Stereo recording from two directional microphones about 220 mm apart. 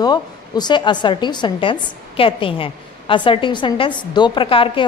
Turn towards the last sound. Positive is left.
turn(degrees=25)  # may be behind; listen again after turning